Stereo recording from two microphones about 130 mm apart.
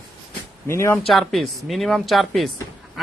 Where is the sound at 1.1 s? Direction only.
Centre (ahead or behind).